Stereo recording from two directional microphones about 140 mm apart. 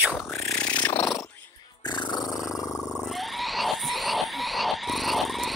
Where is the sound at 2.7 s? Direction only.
Centre (ahead or behind).